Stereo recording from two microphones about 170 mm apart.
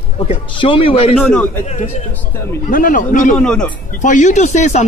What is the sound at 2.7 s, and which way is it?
Speech, 55° left (ahead or behind).